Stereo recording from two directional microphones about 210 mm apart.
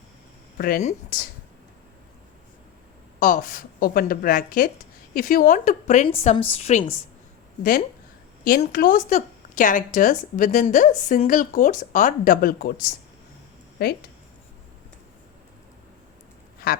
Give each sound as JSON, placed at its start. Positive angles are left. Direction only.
{"t": 0.6, "sound": "speech", "side_deg": 35}
{"t": 3.2, "sound": "a woman's voice", "side_deg": 40}
{"t": 8.4, "sound": "a woman's voice", "side_deg": 45}